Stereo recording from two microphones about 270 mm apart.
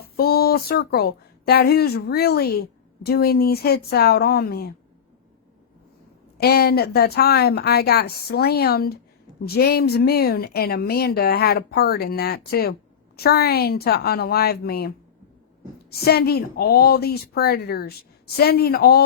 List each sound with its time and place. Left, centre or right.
0.0 s speech: left
6.3 s speech: left